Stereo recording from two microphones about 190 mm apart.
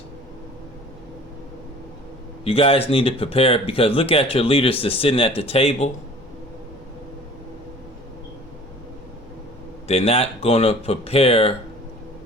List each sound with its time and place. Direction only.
2.4 s speech: 30° left (ahead or behind)
9.8 s speech: 30° left (ahead or behind)